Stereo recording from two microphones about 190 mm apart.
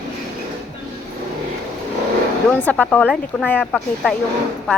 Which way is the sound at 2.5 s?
10° left (ahead or behind).